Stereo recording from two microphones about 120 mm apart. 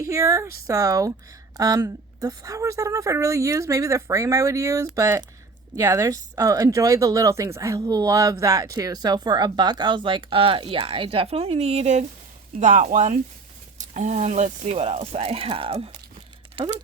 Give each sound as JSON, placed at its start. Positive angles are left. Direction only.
{"t": 0.0, "sound": "speech", "side_deg": -25}
{"t": 12.5, "sound": "speech", "side_deg": -80}
{"t": 13.7, "sound": "speech", "side_deg": -90}